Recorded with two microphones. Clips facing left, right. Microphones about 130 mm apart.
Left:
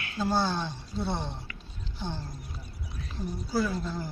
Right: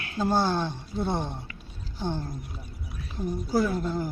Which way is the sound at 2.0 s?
50° right (ahead or behind).